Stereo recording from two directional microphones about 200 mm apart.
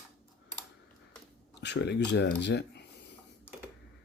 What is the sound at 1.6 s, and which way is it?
Speech, 60° left (ahead or behind).